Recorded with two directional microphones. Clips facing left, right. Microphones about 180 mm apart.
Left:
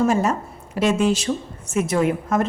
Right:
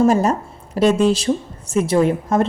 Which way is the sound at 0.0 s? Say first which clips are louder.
Right 4 dB; 35° right (ahead or behind).